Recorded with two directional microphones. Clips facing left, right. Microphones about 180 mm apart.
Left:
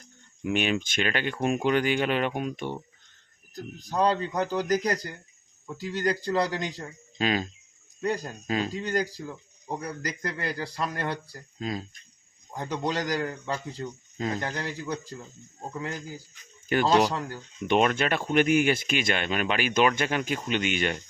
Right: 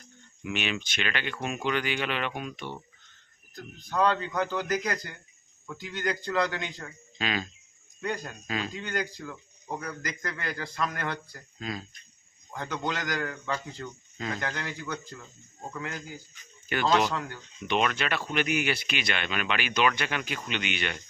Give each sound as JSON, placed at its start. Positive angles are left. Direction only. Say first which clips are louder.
{"t": 0.4, "sound": "speech", "louder": "left 6 dB", "side_deg": 45}